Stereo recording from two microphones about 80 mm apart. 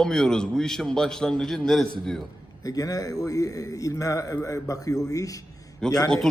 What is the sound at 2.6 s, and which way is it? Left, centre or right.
Speech, left.